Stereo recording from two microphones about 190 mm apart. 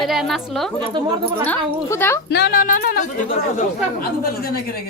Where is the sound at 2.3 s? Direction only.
50° left (ahead or behind).